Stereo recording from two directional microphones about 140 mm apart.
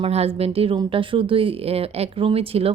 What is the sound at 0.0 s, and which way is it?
A woman's voice, 45° right (ahead or behind).